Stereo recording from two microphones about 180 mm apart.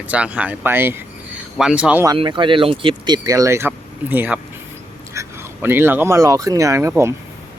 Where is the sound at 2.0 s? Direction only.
30° right (ahead or behind).